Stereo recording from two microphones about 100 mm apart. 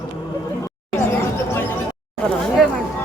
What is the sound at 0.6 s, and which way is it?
Chatter, 25° left (ahead or behind).